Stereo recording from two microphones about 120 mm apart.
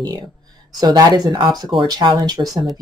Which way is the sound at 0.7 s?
35° right (ahead or behind).